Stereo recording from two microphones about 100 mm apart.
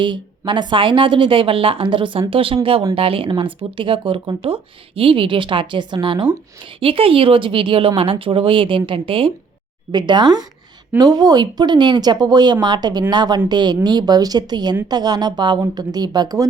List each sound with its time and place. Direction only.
0.0 s speech: 55° right (ahead or behind)
9.9 s speech: 50° right (ahead or behind)